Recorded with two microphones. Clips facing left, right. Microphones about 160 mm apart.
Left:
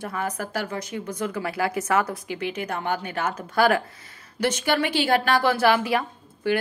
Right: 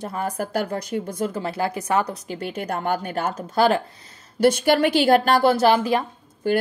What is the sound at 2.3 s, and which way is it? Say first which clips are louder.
Speech: right 1 dB; 40° right (ahead or behind).